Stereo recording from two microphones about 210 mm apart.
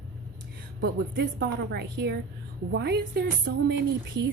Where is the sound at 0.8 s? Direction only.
55° right (ahead or behind).